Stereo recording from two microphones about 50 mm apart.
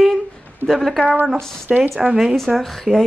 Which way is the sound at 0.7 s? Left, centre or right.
Centre.